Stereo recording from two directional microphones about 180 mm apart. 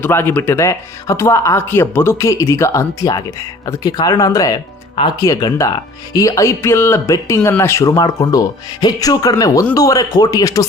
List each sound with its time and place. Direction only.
0.0 s speech: 10° left (ahead or behind)